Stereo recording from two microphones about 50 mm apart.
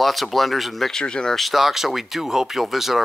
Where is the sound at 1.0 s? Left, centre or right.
Centre.